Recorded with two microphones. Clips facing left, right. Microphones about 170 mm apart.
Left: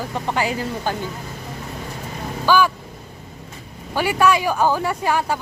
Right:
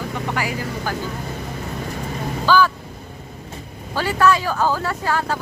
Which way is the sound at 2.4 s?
15° left (ahead or behind).